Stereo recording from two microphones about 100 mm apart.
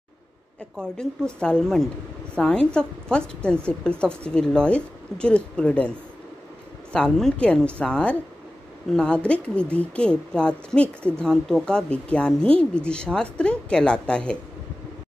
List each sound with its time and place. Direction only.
0.7 s a woman's voice: 10° left (ahead or behind)